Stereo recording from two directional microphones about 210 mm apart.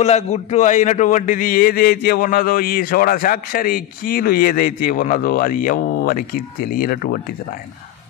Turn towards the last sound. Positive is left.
turn(degrees=45)  # may be behind; listen again after turning